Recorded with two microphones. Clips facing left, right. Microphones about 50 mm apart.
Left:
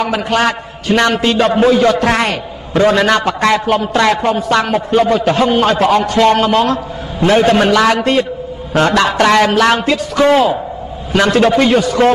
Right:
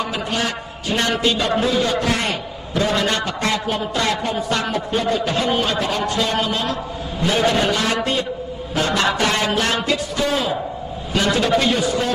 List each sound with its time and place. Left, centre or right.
0.0 s a man's voice: left
4.1 s a man's voice: left
8.7 s a sound: left
9.8 s a man's voice: left